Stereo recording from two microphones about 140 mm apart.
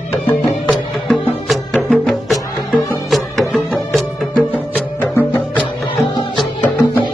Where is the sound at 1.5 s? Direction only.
Centre (ahead or behind).